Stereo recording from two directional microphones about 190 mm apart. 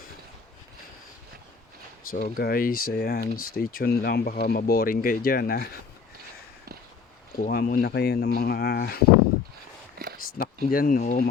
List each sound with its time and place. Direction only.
2.0 s speech: 45° left (ahead or behind)
7.3 s speech: 50° left (ahead or behind)
10.3 s speech: 50° left (ahead or behind)